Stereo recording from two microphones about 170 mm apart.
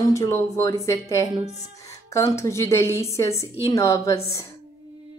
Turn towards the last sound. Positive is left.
turn(degrees=20)  # may be behind; listen again after turning